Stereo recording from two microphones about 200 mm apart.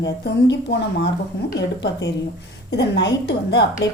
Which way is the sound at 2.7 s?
60° left (ahead or behind).